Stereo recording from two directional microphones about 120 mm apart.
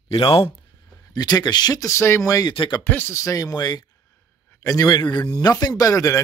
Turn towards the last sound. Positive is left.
turn(degrees=25)  # may be behind; listen again after turning